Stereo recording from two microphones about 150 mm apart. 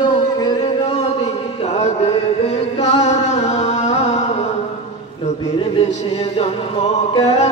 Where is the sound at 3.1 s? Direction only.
50° left (ahead or behind).